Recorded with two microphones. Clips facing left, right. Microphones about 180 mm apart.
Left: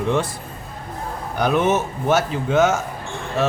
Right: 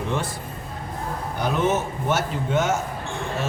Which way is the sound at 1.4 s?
80° left.